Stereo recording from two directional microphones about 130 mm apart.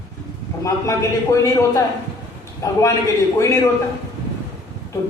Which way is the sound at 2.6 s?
25° left (ahead or behind).